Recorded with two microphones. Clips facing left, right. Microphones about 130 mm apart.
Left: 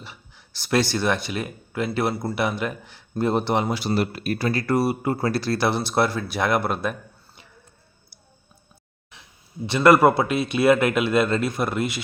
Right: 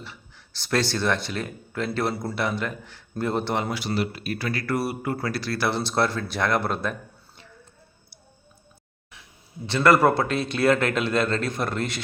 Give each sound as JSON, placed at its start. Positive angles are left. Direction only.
{"t": 0.0, "sound": "speech", "side_deg": 15}
{"t": 3.8, "sound": "speech", "side_deg": 35}
{"t": 4.0, "sound": "speech", "side_deg": 50}
{"t": 4.6, "sound": "speech", "side_deg": 20}
{"t": 5.5, "sound": "speech", "side_deg": 15}
{"t": 9.6, "sound": "speech", "side_deg": 15}